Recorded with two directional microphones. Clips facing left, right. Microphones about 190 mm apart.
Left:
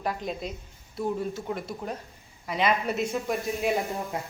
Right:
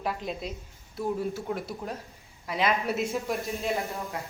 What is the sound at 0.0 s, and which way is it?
Speech, centre (ahead or behind).